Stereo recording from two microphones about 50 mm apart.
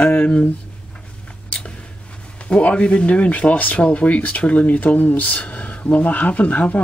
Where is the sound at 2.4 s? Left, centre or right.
Left.